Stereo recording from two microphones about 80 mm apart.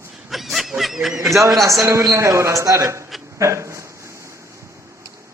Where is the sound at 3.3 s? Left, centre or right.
Right.